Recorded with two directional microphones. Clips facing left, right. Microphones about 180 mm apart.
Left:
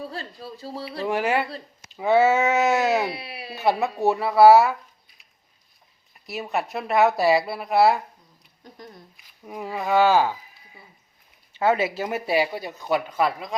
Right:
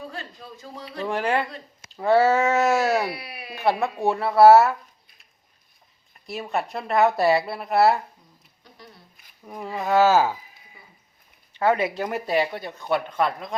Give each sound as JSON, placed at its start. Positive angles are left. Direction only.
{"t": 0.0, "sound": "speech", "side_deg": 35}
{"t": 1.0, "sound": "a woman's voice", "side_deg": 10}
{"t": 3.0, "sound": "speech", "side_deg": 25}
{"t": 3.5, "sound": "a woman's voice", "side_deg": 5}
{"t": 6.2, "sound": "a woman's voice", "side_deg": 5}
{"t": 9.5, "sound": "a woman's voice", "side_deg": 5}
{"t": 11.6, "sound": "speech", "side_deg": 25}
{"t": 11.9, "sound": "a woman's voice", "side_deg": 5}